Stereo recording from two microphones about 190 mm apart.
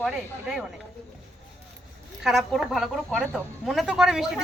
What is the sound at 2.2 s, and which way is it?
Speech, centre (ahead or behind).